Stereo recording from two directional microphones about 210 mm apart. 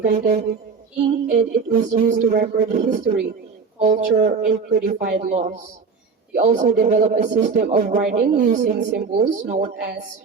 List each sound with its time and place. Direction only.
0.0 s speech: 45° right (ahead or behind); by 9.6 s 30° right (ahead or behind)